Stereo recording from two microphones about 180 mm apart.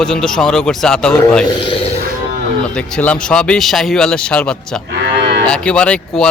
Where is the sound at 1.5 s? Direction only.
30° left (ahead or behind).